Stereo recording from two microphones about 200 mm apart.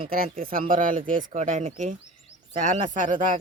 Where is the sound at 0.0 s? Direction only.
45° right (ahead or behind).